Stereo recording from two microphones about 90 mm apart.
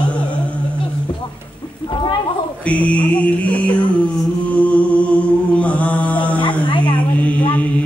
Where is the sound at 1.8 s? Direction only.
65° left (ahead or behind).